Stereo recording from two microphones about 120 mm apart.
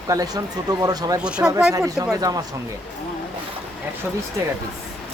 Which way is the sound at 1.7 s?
25° right (ahead or behind).